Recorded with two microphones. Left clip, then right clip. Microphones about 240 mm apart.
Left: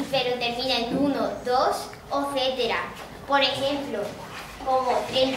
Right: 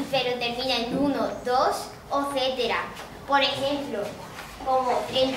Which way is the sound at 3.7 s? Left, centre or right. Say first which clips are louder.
Even; centre.